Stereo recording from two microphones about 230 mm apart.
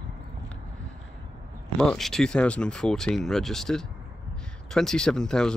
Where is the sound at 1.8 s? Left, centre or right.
Centre.